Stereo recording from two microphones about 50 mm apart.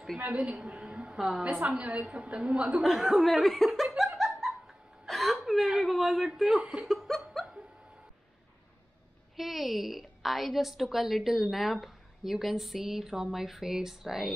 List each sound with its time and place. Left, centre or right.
0.2 s a woman's voice: right
2.8 s a woman's voice: centre
3.4 s speech: centre
4.2 s laughter: centre
5.4 s whimper: centre
6.6 s a woman's voice: right
6.9 s laughter: centre
9.4 s a woman's voice: centre